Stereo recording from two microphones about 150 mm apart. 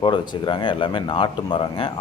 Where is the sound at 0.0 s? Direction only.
30° left (ahead or behind).